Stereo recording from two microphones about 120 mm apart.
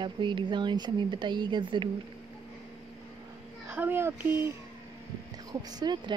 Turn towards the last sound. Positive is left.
turn(degrees=-35)  # may be behind; listen again after turning